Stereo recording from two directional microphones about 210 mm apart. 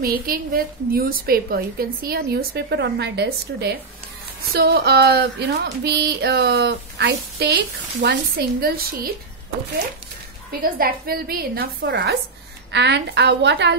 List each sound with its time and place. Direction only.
0.0 s speech: 45° right (ahead or behind)
10.6 s a woman's voice: 45° right (ahead or behind)